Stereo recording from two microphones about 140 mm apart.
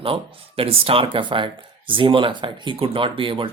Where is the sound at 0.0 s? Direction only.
40° right (ahead or behind).